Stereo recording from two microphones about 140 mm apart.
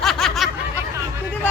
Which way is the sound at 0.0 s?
5° left (ahead or behind).